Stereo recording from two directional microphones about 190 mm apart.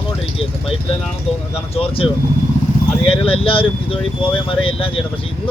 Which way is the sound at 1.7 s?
30° left (ahead or behind).